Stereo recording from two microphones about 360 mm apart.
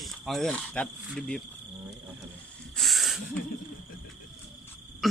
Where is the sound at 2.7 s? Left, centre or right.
Centre.